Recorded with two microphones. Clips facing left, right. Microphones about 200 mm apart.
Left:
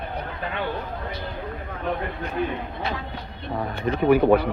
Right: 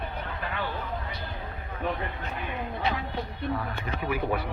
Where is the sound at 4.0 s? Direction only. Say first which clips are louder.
Left 13 dB; 65° left (ahead or behind).